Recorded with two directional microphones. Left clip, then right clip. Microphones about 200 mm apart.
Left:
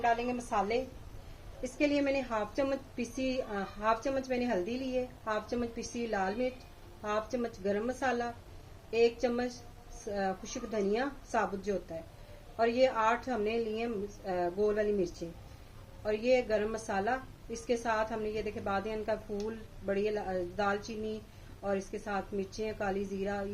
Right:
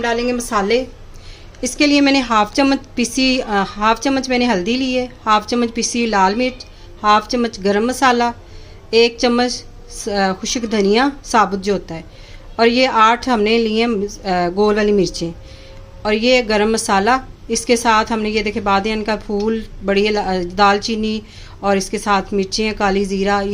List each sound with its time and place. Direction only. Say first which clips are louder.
0.2 s a woman's voice: right 15 dB; 55° right (ahead or behind)
1.8 s a woman's voice: right 16 dB; 55° right (ahead or behind)